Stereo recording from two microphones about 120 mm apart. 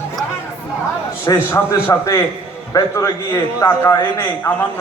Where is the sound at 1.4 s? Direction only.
20° left (ahead or behind).